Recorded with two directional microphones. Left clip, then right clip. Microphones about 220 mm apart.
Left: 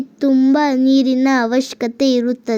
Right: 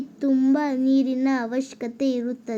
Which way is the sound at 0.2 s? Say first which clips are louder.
Left 7 dB; 35° left (ahead or behind).